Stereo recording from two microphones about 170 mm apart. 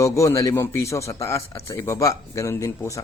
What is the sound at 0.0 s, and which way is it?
A man's voice, 20° left (ahead or behind).